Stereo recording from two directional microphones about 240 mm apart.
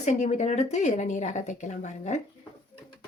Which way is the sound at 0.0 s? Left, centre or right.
Left.